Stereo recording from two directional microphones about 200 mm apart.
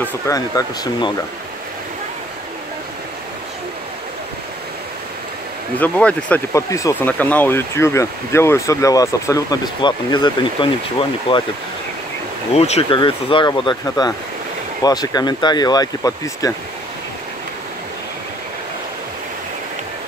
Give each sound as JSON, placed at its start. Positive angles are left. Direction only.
{"t": 0.0, "sound": "speech", "side_deg": 15}
{"t": 5.8, "sound": "speech", "side_deg": 5}
{"t": 12.5, "sound": "speech", "side_deg": 30}